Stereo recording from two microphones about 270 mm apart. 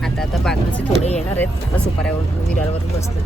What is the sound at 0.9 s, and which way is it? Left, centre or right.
Speech, left.